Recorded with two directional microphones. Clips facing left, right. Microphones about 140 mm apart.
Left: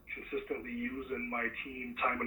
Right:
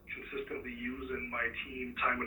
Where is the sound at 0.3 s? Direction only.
35° left (ahead or behind).